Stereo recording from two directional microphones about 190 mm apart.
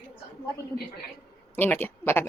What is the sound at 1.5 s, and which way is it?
Speech, 10° left (ahead or behind).